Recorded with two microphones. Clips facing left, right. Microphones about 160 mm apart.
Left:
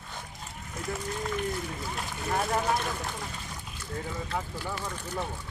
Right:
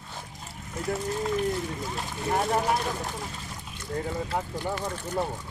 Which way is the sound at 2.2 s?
25° right (ahead or behind).